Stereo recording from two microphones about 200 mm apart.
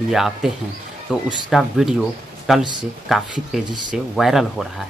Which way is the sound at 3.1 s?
Centre (ahead or behind).